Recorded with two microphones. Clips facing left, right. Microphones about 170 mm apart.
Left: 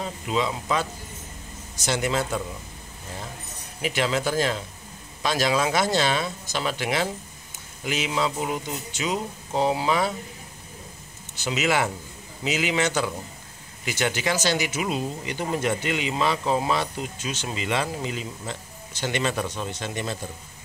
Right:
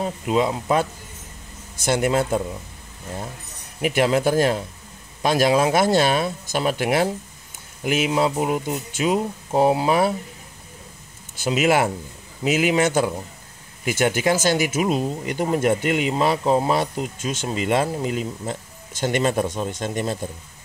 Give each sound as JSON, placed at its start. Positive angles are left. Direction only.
{"t": 0.0, "sound": "speech", "side_deg": -50}
{"t": 3.8, "sound": "speech", "side_deg": -50}
{"t": 11.3, "sound": "speech", "side_deg": -50}